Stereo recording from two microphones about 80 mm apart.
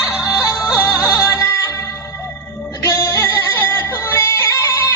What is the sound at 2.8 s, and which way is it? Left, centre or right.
Music, left.